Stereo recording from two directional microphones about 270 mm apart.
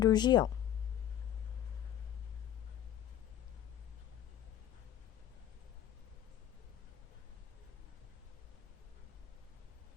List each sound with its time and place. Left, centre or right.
0.0 s speech: centre